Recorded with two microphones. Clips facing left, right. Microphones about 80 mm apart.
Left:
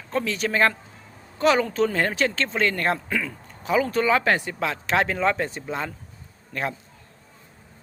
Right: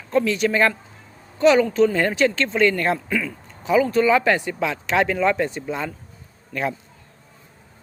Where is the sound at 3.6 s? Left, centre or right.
Left.